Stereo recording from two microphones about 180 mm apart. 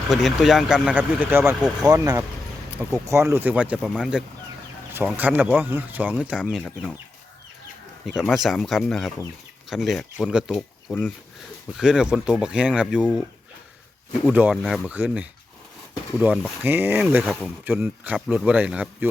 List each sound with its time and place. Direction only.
0.1 s speech: centre (ahead or behind)
4.9 s speech: 10° right (ahead or behind)
8.0 s speech: centre (ahead or behind)
12.9 s speech: 5° left (ahead or behind)
14.3 s speech: 5° right (ahead or behind)